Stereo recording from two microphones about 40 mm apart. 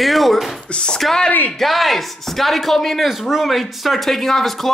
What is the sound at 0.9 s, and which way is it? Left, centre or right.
Speech, centre.